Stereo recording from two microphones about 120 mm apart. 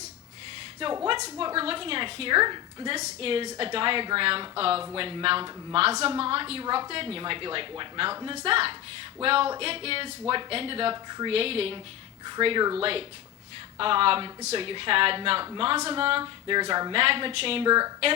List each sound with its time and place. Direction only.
0.8 s a woman's voice: 50° right (ahead or behind)
3.0 s a woman's voice: 50° right (ahead or behind)
6.1 s a woman's voice: 50° right (ahead or behind)
10.9 s speech: 35° right (ahead or behind)
11.3 s a woman's voice: 55° right (ahead or behind)
12.2 s a woman's voice: 45° right (ahead or behind)
16.2 s a sound: 35° right (ahead or behind)
16.9 s a woman's voice: 50° right (ahead or behind)
17.7 s speech: 30° right (ahead or behind)